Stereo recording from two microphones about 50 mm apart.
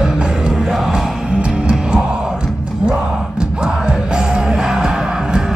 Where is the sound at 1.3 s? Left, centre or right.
Centre.